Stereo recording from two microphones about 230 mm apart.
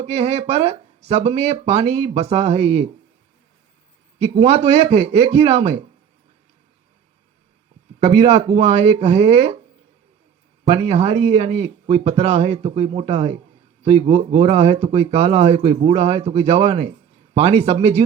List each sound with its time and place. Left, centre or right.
0.0 s speech: right
4.2 s speech: right
7.9 s speech: right
10.7 s speech: right